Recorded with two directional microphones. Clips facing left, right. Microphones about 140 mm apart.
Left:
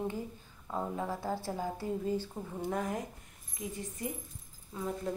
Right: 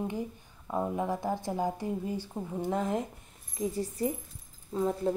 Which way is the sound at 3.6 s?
35° right (ahead or behind).